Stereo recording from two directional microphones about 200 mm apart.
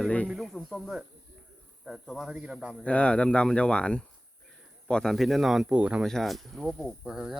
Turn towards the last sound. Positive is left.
turn(degrees=-5)  # may be behind; listen again after turning